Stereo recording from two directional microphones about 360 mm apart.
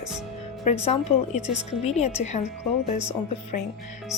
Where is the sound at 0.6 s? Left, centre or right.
Centre.